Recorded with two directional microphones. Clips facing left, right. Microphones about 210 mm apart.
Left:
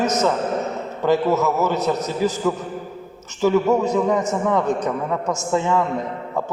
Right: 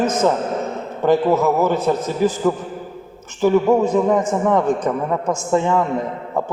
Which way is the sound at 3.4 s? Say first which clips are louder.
Right 3 dB; 50° right (ahead or behind).